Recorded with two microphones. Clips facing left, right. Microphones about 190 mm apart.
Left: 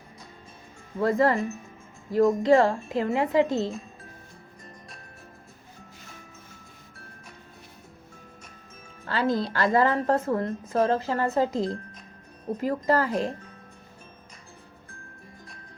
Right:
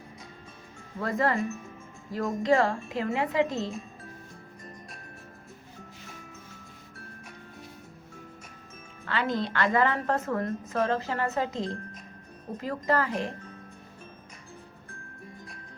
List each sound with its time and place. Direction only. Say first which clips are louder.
1.0 s a woman's voice: left 5 dB; 30° left (ahead or behind)
9.0 s a woman's voice: left 4 dB; 35° left (ahead or behind)